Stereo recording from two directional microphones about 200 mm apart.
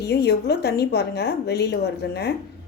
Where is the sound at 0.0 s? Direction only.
55° left (ahead or behind).